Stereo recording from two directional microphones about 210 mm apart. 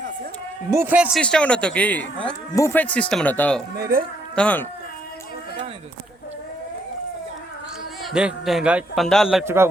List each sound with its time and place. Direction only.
0.7 s a man's voice: 10° right (ahead or behind)
1.2 s speech: 5° left (ahead or behind)
3.8 s speech: 45° right (ahead or behind)
4.4 s speech: 5° left (ahead or behind)
8.0 s speech: centre (ahead or behind)